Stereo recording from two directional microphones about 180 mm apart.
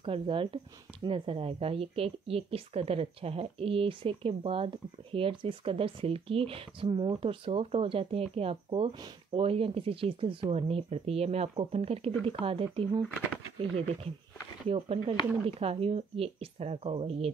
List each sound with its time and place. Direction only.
0.0 s speech: 30° right (ahead or behind)
14.7 s speech: 30° right (ahead or behind)